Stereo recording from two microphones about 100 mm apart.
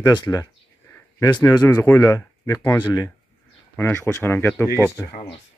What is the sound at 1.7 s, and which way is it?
Speech, 20° left (ahead or behind).